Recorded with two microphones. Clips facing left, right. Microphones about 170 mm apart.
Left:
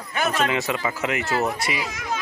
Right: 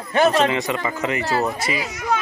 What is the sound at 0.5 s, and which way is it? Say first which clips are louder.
Speech: right 2 dB; 5° left (ahead or behind).